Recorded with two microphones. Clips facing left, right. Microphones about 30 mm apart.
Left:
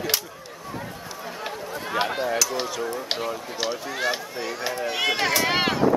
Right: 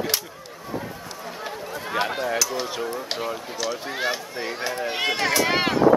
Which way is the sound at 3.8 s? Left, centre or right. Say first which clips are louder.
Even; centre.